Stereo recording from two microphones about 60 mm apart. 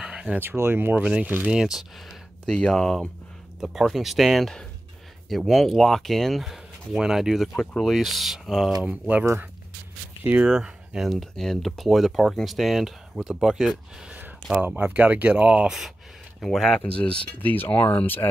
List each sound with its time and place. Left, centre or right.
0.0 s a sound: centre
0.4 s speech: right
1.5 s speech: centre
2.4 s speech: centre
3.6 s speech: centre
8.8 s speech: right
10.2 s speech: right
10.5 s speech: centre
11.1 s speech: centre
14.1 s a sound: right
14.8 s speech: right
16.3 s speech: centre
16.8 s speech: left